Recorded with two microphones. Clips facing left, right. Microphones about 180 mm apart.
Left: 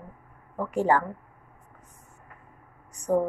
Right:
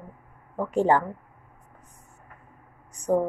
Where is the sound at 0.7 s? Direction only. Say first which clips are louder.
Right 2 dB; 25° right (ahead or behind).